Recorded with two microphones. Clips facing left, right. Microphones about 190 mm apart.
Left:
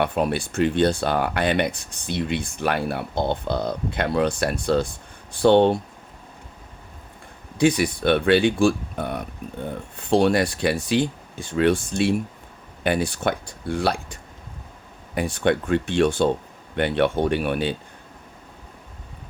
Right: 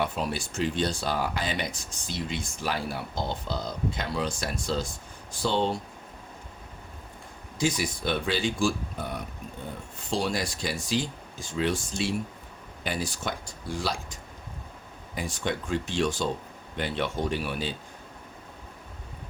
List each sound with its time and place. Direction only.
0.0 s speech: 60° left (ahead or behind)
7.6 s speech: 65° left (ahead or behind)